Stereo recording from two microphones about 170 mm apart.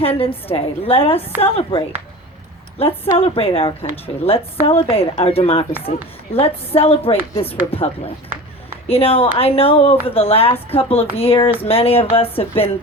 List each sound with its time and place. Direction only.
0.0 s a woman's voice: 35° left (ahead or behind)